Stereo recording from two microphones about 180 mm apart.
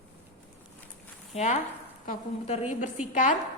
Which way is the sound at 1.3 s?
40° left (ahead or behind).